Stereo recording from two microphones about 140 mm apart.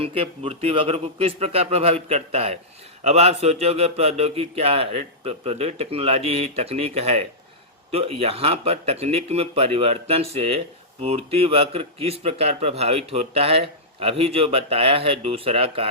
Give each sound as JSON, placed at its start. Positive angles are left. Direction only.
{"t": 0.0, "sound": "a man's voice", "side_deg": -40}